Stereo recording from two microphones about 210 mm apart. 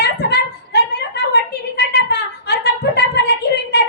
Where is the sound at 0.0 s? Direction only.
50° left (ahead or behind).